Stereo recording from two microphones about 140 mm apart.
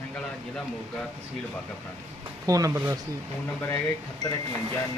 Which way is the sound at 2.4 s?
25° right (ahead or behind).